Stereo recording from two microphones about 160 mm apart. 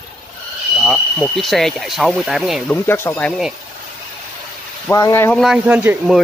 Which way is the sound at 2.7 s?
10° left (ahead or behind).